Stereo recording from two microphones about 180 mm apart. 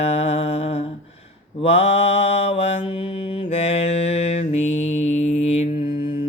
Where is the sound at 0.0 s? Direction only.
35° left (ahead or behind).